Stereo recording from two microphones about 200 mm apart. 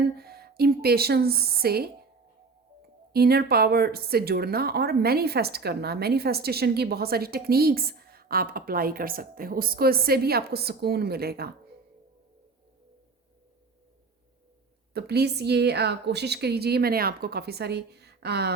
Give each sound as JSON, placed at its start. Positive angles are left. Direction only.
{"t": 0.2, "sound": "speech", "side_deg": -50}
{"t": 3.1, "sound": "speech", "side_deg": -50}
{"t": 14.9, "sound": "a woman's voice", "side_deg": -55}